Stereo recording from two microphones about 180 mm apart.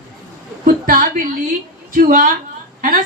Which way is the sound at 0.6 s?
50° right (ahead or behind).